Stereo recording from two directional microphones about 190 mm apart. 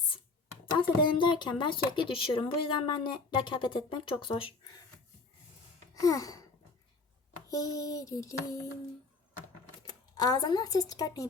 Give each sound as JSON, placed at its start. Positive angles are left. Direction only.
{"t": 0.6, "sound": "speech", "side_deg": 25}
{"t": 5.9, "sound": "wail", "side_deg": 20}
{"t": 7.5, "sound": "a sound", "side_deg": 20}
{"t": 9.8, "sound": "speech", "side_deg": 20}